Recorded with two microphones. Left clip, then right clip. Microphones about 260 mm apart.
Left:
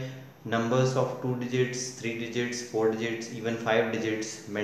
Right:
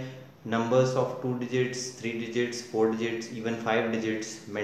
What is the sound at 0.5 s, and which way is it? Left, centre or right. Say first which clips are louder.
A man's voice: right 2 dB; centre.